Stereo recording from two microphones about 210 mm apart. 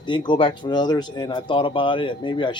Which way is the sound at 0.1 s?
20° left (ahead or behind).